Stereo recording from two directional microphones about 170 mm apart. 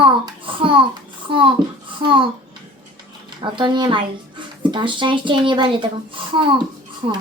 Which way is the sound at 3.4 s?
30° right (ahead or behind).